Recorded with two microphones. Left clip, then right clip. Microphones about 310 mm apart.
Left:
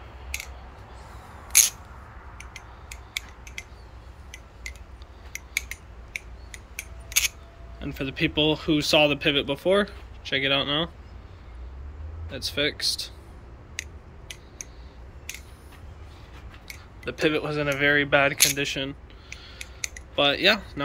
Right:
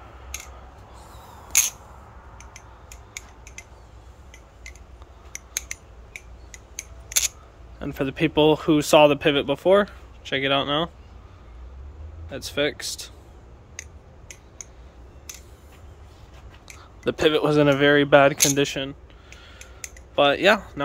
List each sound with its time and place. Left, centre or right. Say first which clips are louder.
3.2 s a sound: left 6 dB; centre
5.3 s scissors: left 1 dB; centre
7.8 s speech: right 3 dB; centre
12.3 s speech: right 2 dB; centre
17.0 s speech: right 5 dB; right
18.8 s a sound: right 1 dB; centre